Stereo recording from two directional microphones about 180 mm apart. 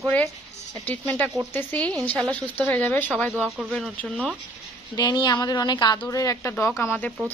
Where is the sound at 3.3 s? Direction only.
5° right (ahead or behind).